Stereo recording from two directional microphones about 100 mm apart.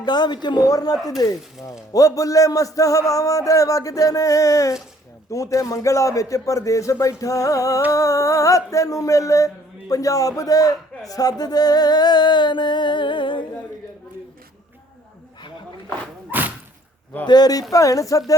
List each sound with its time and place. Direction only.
0.0 s a man's voice: 45° left (ahead or behind)
17.2 s a man's voice: 40° left (ahead or behind)